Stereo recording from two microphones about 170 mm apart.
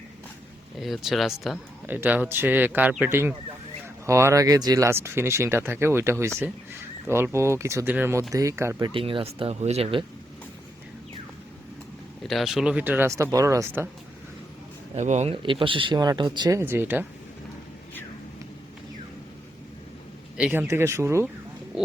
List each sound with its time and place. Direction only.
0.8 s speech: centre (ahead or behind)
1.9 s speech: 10° right (ahead or behind)
8.9 s speech: 30° right (ahead or behind)
12.2 s speech: centre (ahead or behind); by 13.8 s 15° right (ahead or behind)
14.9 s speech: 40° right (ahead or behind); by 17.1 s 10° right (ahead or behind)
20.3 s speech: 10° right (ahead or behind)